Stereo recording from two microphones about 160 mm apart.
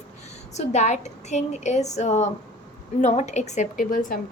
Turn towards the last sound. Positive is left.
turn(degrees=60)  # may be behind; listen again after turning